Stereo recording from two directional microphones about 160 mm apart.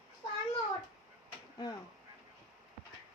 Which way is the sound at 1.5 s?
25° left (ahead or behind).